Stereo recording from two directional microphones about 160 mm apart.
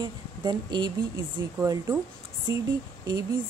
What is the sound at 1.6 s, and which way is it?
Speech, 15° right (ahead or behind).